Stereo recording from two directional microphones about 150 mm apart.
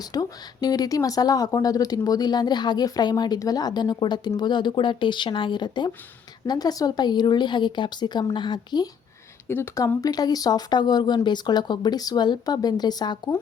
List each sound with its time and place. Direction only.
0.0 s speech: 25° left (ahead or behind)
9.5 s speech: 15° left (ahead or behind)